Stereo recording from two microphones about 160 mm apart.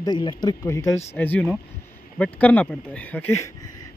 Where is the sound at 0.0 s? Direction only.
25° left (ahead or behind).